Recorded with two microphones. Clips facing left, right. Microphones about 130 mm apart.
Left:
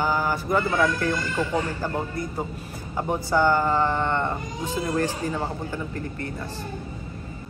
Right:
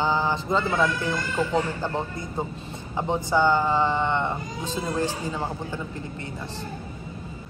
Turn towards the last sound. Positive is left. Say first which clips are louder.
# left 3 dB
turn(degrees=-15)  # may be behind; listen again after turning